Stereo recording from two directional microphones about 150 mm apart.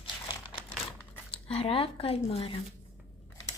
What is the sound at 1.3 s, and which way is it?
Speech, 40° left (ahead or behind).